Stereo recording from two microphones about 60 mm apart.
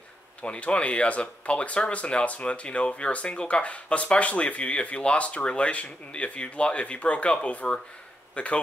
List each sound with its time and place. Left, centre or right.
0.4 s speech: centre